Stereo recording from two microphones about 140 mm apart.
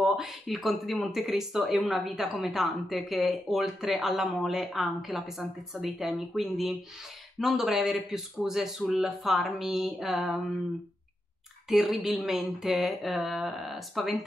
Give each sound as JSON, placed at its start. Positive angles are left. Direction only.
{"t": 0.0, "sound": "speech", "side_deg": -5}
{"t": 11.7, "sound": "speech", "side_deg": 0}